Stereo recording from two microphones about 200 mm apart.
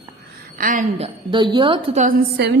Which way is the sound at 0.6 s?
40° right (ahead or behind).